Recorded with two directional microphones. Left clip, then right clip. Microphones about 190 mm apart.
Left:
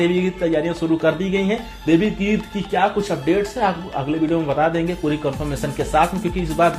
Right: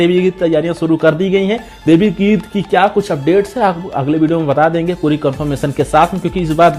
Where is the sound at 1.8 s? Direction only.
40° right (ahead or behind).